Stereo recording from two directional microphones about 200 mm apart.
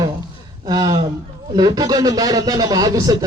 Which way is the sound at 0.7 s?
20° right (ahead or behind).